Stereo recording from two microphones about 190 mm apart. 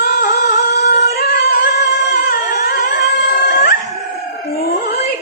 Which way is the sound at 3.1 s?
50° left (ahead or behind).